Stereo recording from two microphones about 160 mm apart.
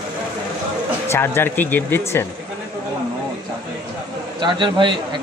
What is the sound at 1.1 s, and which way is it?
Speech, 15° left (ahead or behind).